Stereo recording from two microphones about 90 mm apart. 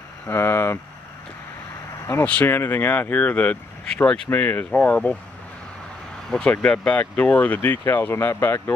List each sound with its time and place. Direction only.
0.3 s speech: 25° left (ahead or behind)
2.4 s speech: 25° left (ahead or behind); by 4.2 s 10° left (ahead or behind)
4.3 s speech: 20° left (ahead or behind)
6.3 s speech: 10° left (ahead or behind); by 8.7 s 30° left (ahead or behind)